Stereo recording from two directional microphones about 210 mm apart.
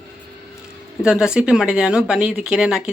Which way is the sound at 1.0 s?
5° right (ahead or behind).